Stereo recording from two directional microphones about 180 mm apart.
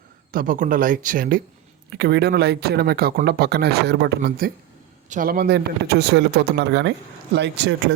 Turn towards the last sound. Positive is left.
turn(degrees=-75)  # may be behind; listen again after turning